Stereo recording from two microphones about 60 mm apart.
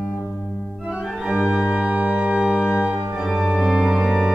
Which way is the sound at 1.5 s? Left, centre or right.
Centre.